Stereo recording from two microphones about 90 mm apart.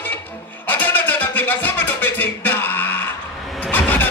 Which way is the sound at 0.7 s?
20° left (ahead or behind).